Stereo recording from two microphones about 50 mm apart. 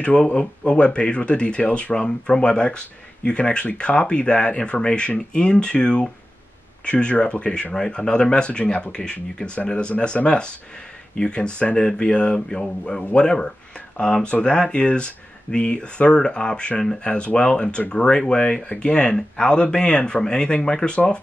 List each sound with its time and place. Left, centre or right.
0.2 s speech: centre